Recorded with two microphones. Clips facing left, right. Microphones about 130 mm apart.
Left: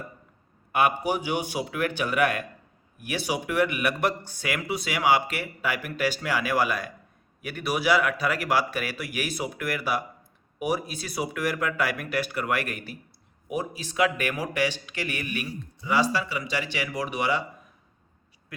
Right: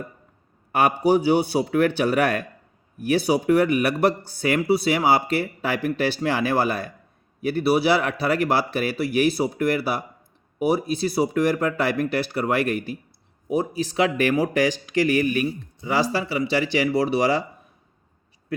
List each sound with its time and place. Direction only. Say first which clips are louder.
0.7 s speech: right 5 dB; 35° right (ahead or behind)